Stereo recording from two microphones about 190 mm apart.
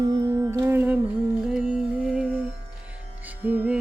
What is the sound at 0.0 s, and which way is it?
Music, 20° right (ahead or behind).